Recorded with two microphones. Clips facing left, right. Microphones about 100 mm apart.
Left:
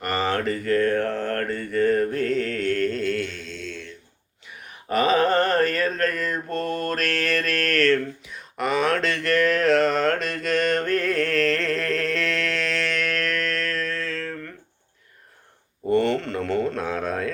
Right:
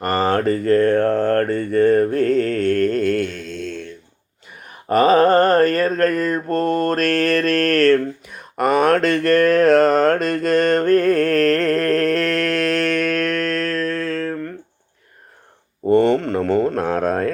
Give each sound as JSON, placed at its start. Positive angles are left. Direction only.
{"t": 0.0, "sound": "mantra", "side_deg": -40}
{"t": 4.9, "sound": "mantra", "side_deg": -45}
{"t": 15.9, "sound": "a sound", "side_deg": -45}